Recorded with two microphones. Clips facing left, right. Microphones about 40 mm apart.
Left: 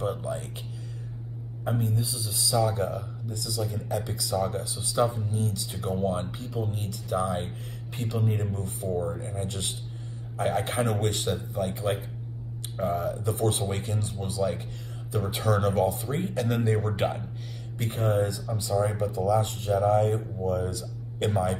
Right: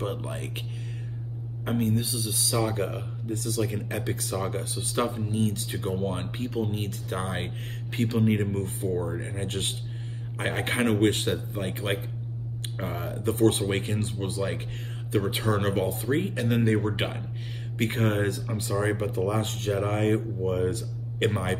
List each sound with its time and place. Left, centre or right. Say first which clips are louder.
1.6 s speech: right 3 dB; right
6.5 s speech: right 2 dB; right
16.3 s speech: right 1 dB; right
16.6 s speech: right 2 dB; right
16.9 s speech: left 3 dB; centre
17.7 s speech: even; right